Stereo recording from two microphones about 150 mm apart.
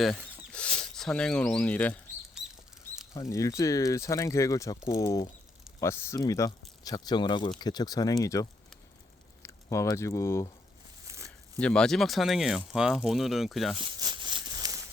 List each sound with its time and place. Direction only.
0.0 s speech: 5° left (ahead or behind)
3.2 s speech: 20° left (ahead or behind)
11.6 s speech: 5° left (ahead or behind)
13.7 s a sound: 30° right (ahead or behind)